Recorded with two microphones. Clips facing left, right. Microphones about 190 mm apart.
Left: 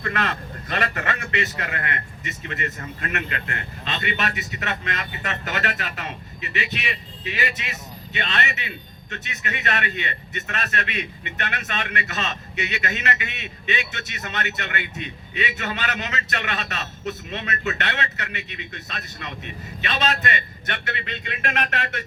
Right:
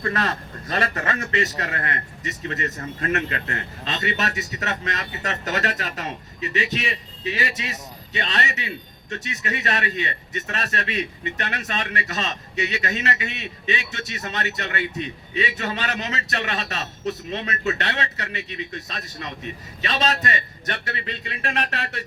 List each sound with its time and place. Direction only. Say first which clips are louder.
0.0 s a man's voice: right 2 dB; 35° right (ahead or behind)